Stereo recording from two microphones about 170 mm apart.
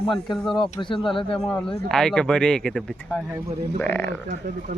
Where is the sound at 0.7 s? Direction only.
30° left (ahead or behind).